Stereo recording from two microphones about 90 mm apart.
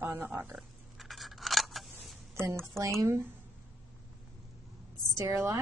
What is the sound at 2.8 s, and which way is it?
Speech, 35° right (ahead or behind).